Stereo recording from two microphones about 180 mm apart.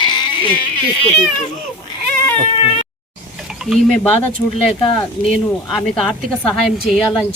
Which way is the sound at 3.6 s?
5° right (ahead or behind).